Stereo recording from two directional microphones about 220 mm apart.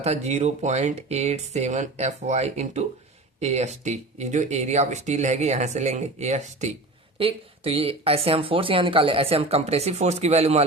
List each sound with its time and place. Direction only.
0.0 s speech: 30° right (ahead or behind)